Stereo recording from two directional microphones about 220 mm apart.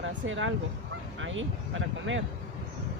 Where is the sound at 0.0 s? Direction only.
60° right (ahead or behind).